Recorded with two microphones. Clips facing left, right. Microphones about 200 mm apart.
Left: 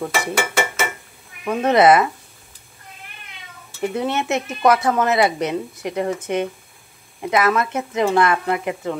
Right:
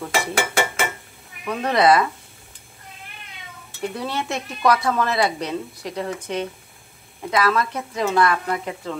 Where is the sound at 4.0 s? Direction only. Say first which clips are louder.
Left 6 dB; 20° left (ahead or behind).